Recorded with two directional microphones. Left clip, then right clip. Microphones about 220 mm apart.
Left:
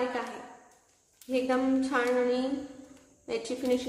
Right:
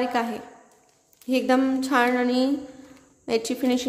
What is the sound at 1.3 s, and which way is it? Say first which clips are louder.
A woman's voice: right 6 dB; 45° right (ahead or behind).